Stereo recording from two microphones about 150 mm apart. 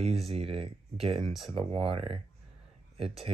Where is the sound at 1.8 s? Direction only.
40° right (ahead or behind).